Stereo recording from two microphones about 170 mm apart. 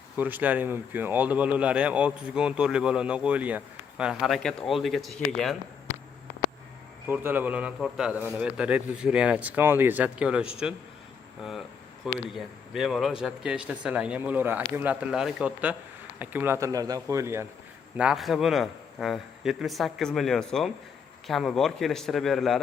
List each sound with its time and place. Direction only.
0.2 s speech: 10° right (ahead or behind)
7.1 s speech: 10° right (ahead or behind)
12.0 s speech: centre (ahead or behind)
17.9 s a man's voice: 5° right (ahead or behind)